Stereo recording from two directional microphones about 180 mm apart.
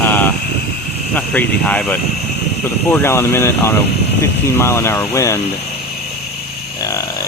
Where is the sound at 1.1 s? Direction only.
10° left (ahead or behind).